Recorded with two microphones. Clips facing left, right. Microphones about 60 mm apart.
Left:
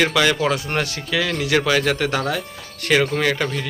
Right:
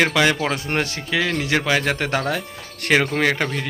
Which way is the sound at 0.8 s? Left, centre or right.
Right.